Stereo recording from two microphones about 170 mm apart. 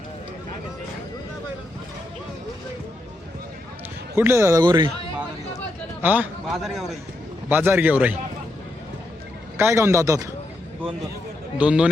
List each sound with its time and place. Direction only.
4.2 s a man's voice: 15° right (ahead or behind)
4.6 s speech: 25° right (ahead or behind)
6.0 s a man's voice: 10° right (ahead or behind)
7.5 s a man's voice: 15° right (ahead or behind)
9.6 s a man's voice: 15° right (ahead or behind)
11.5 s a man's voice: 5° right (ahead or behind)